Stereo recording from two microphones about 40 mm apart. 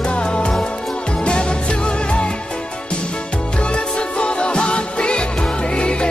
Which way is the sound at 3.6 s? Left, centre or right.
Left.